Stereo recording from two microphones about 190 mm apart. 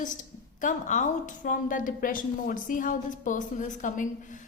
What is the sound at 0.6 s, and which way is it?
A woman's voice, 40° left (ahead or behind).